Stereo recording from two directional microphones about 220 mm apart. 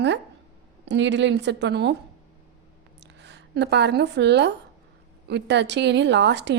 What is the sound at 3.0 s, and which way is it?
A woman's voice, 50° right (ahead or behind).